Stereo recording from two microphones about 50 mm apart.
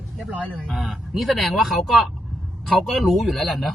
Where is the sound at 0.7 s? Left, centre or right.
Centre.